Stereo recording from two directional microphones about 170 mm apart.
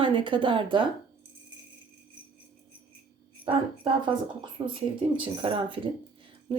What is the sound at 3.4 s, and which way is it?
Speech, 30° right (ahead or behind).